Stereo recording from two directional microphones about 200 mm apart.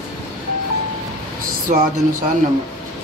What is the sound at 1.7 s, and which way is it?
Speech, 40° right (ahead or behind).